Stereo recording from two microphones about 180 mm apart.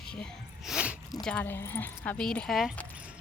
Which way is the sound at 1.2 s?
5° left (ahead or behind).